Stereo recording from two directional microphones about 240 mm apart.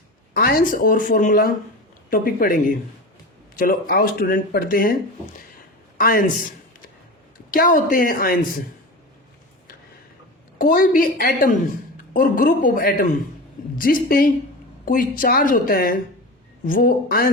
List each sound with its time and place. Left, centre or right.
0.3 s speech: left
6.0 s speech: left
7.5 s speech: left
10.6 s speech: left